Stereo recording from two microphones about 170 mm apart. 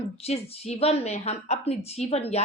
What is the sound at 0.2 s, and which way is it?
A woman's voice, 35° left (ahead or behind).